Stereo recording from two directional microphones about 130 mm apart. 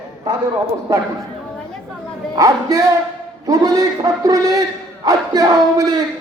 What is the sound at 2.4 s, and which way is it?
A man's voice, 25° right (ahead or behind).